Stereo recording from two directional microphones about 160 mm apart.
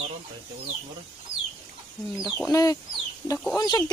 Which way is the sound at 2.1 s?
Centre (ahead or behind).